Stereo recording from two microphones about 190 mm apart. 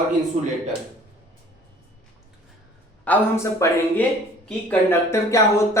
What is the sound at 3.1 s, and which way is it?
Speech, 15° left (ahead or behind).